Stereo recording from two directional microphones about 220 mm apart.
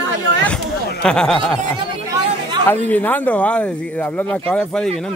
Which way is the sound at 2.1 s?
20° right (ahead or behind).